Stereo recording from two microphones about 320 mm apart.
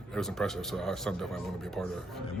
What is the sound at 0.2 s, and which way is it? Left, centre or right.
Speech, centre.